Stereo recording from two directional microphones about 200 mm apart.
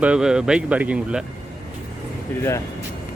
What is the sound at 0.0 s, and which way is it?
Speech, 5° right (ahead or behind).